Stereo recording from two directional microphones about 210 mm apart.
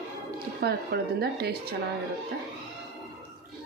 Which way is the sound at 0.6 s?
50° right (ahead or behind).